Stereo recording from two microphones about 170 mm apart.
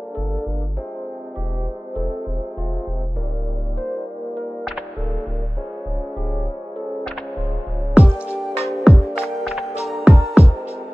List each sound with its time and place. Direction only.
7.9 s music: 5° right (ahead or behind)